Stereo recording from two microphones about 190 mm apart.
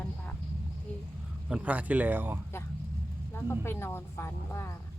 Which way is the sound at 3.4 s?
10° left (ahead or behind).